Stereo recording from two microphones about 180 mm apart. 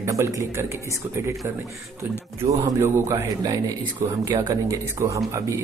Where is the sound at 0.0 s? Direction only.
15° right (ahead or behind).